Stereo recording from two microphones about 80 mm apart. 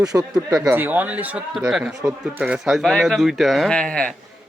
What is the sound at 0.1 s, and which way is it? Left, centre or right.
Speech, right.